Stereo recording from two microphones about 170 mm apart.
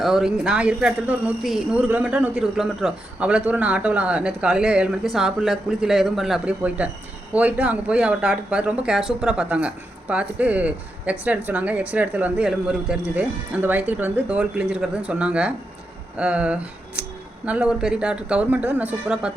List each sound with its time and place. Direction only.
0.0 s speech: centre (ahead or behind)